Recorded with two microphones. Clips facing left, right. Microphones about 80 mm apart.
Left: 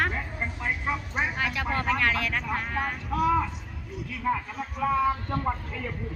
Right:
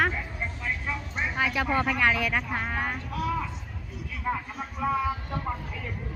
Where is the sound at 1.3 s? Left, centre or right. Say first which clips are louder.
Right 3 dB; centre.